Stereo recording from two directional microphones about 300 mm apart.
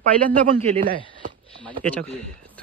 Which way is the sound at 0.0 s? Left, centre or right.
Right.